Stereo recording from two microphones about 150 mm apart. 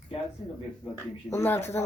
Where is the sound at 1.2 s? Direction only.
15° left (ahead or behind).